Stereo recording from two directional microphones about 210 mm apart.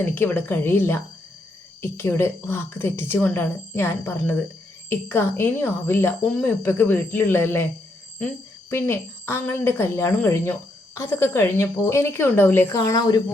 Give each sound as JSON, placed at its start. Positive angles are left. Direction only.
{"t": 0.0, "sound": "speech", "side_deg": 10}
{"t": 8.7, "sound": "speech", "side_deg": 10}